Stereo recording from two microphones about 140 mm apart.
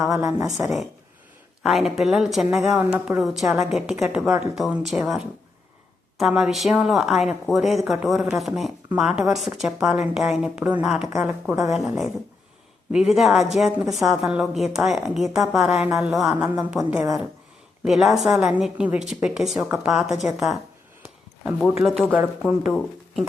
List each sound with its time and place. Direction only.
0.2 s a woman's voice: 25° right (ahead or behind)
1.6 s a woman's voice: centre (ahead or behind)
21.8 s a woman's voice: 5° left (ahead or behind)
22.1 s a woman's voice: 5° right (ahead or behind)